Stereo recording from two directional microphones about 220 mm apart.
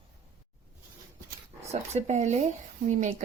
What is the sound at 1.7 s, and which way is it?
A woman's voice, 30° right (ahead or behind).